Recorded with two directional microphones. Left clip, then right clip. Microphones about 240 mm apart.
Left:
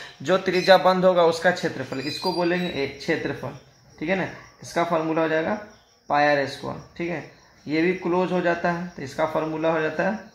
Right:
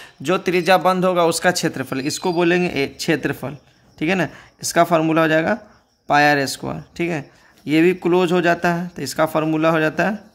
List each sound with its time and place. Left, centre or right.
0.3 s a man's voice: right